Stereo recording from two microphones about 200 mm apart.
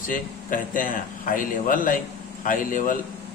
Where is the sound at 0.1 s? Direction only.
45° left (ahead or behind).